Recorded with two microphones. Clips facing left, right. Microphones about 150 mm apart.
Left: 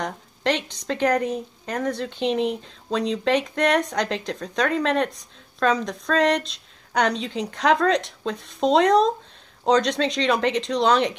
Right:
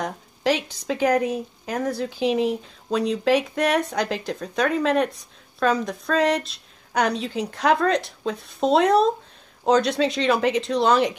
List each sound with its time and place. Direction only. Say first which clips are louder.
0.0 s speech: right 1 dB; 5° right (ahead or behind)